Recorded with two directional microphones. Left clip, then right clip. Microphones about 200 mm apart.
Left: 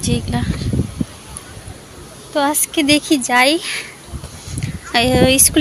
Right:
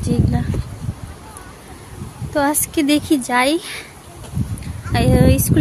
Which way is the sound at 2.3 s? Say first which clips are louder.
Left 1 dB; 15° right (ahead or behind).